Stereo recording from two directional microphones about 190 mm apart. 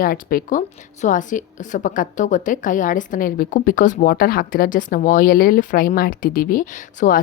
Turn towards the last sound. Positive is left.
turn(degrees=45)  # may be behind; listen again after turning